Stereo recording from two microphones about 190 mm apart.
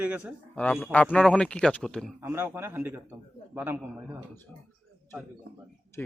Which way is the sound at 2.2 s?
10° right (ahead or behind).